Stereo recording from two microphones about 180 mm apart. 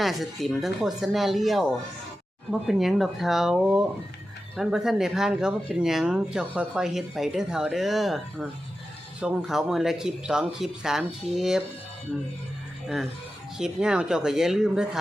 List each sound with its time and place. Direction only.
0.0 s speech: centre (ahead or behind)
13.6 s speech: 5° right (ahead or behind)